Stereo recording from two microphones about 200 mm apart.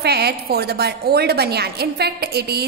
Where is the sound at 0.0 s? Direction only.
55° right (ahead or behind).